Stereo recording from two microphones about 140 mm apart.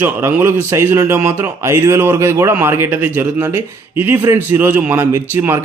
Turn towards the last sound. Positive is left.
turn(degrees=-15)  # may be behind; listen again after turning